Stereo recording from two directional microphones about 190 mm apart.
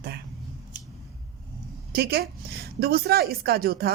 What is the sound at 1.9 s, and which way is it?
A woman's voice, 55° right (ahead or behind).